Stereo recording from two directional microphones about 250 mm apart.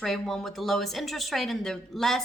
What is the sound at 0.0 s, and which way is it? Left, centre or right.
A woman's voice, centre.